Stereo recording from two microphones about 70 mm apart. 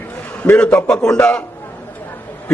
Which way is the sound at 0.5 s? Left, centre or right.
Centre.